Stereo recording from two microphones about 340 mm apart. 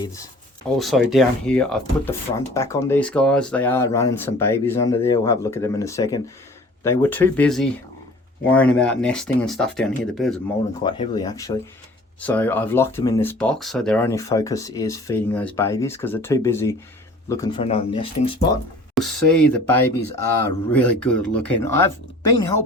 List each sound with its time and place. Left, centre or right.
0.8 s speech: centre
10.8 s speech: centre
18.9 s speech: centre